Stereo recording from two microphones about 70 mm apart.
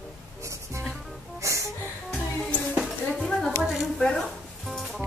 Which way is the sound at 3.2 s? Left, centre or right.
Centre.